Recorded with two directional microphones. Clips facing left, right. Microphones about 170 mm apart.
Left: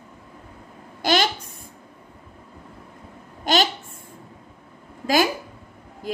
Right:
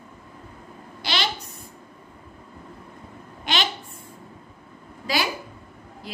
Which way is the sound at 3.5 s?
40° left (ahead or behind).